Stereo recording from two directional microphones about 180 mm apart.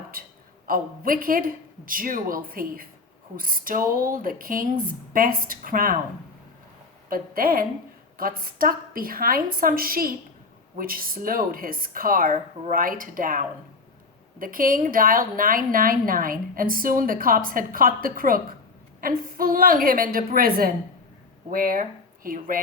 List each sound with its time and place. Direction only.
0.7 s a woman's voice: 50° right (ahead or behind)
7.1 s a woman's voice: 50° right (ahead or behind)
21.5 s speech: 50° right (ahead or behind)